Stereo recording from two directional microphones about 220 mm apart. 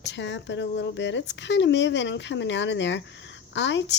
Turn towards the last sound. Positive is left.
turn(degrees=55)  # may be behind; listen again after turning